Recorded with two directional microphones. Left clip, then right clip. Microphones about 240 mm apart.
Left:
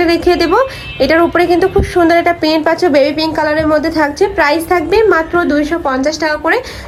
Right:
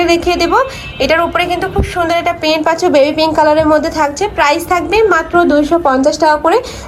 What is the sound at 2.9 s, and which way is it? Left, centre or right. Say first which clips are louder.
A woman's voice: right 2 dB; centre.